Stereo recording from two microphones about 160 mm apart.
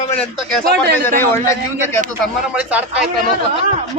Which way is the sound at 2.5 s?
10° right (ahead or behind).